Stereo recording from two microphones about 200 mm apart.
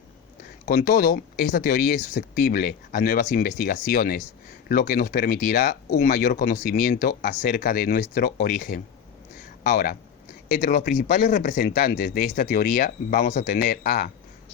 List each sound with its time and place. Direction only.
0.6 s speech: 50° left (ahead or behind)
9.4 s a sound: 45° left (ahead or behind)
10.6 s speech: 40° left (ahead or behind)